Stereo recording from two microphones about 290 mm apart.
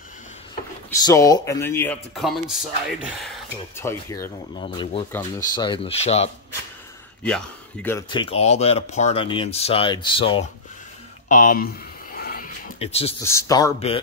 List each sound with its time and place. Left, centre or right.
0.8 s speech: centre
7.2 s speech: centre
11.2 s a sound: left
12.7 s speech: centre
13.2 s speech: centre